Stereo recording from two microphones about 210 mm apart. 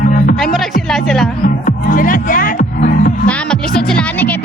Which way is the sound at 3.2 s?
5° left (ahead or behind).